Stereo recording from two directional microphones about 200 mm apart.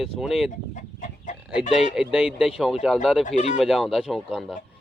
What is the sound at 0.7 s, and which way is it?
Chicken, 40° left (ahead or behind).